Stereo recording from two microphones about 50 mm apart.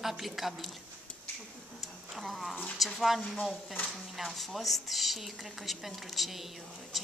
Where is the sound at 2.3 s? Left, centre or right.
Centre.